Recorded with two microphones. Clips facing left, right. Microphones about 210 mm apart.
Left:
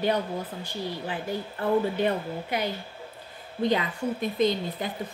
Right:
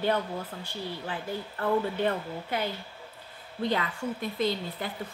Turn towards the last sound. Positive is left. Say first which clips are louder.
# left 4 dB
turn(degrees=20)  # may be behind; listen again after turning